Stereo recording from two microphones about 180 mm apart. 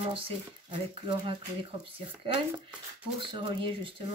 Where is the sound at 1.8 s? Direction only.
30° right (ahead or behind).